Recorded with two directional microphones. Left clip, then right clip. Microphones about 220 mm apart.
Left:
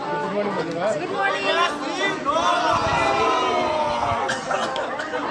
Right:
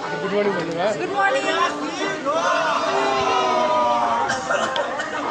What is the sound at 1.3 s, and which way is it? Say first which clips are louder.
Speech: right 1 dB; 55° left (ahead or behind).